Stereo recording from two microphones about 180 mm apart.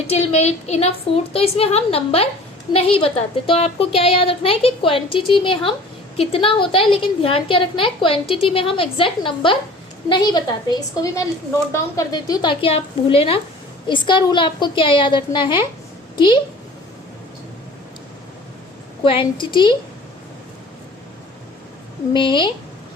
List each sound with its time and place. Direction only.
0.1 s a woman's voice: 35° left (ahead or behind)
19.0 s a woman's voice: 30° left (ahead or behind)
22.1 s a woman's voice: 25° left (ahead or behind)